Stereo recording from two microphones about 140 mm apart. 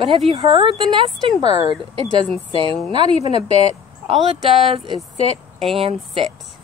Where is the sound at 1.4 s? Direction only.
45° left (ahead or behind).